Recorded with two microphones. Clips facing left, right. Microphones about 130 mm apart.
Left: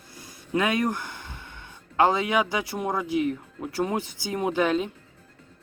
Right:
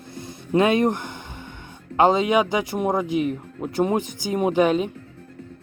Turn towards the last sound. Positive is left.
turn(degrees=-20)  # may be behind; listen again after turning